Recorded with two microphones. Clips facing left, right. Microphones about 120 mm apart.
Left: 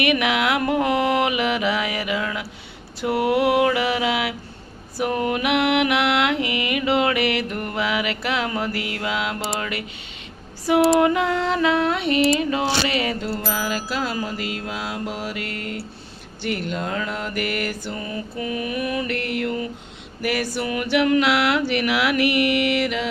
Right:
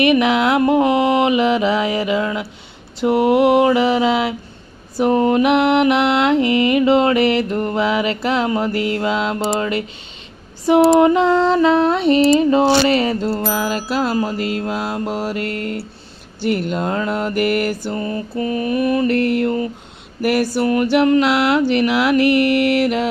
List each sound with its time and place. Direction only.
0.0 s mantra: 30° right (ahead or behind)
13.4 s music: centre (ahead or behind)
14.1 s music: 35° right (ahead or behind)
16.4 s mantra: 45° right (ahead or behind)